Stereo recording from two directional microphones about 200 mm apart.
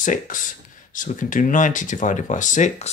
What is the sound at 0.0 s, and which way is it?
Speech, 40° left (ahead or behind).